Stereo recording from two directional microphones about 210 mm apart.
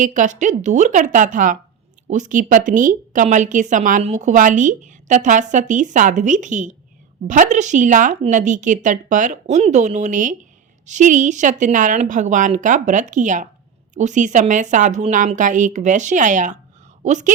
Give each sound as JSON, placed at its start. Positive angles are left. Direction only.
{"t": 0.0, "sound": "a woman's voice", "side_deg": -35}